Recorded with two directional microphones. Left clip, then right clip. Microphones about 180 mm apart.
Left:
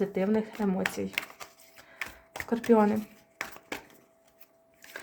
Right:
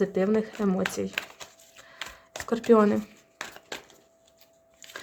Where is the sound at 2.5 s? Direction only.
35° right (ahead or behind).